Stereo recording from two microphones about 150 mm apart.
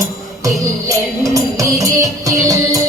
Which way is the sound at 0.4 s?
20° right (ahead or behind).